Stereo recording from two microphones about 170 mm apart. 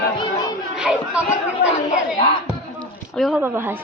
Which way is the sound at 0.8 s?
5° right (ahead or behind).